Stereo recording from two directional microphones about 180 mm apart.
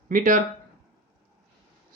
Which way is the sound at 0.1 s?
45° right (ahead or behind).